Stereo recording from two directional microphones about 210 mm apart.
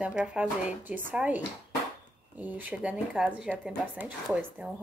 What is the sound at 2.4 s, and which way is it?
Speech, 10° right (ahead or behind).